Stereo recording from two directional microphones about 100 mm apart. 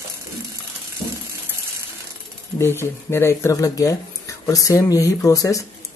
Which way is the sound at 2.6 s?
25° left (ahead or behind).